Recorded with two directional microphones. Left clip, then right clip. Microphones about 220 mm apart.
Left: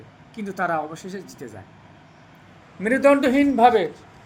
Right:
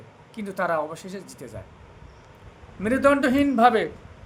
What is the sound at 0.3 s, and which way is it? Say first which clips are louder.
Speech: left 1 dB; 10° right (ahead or behind).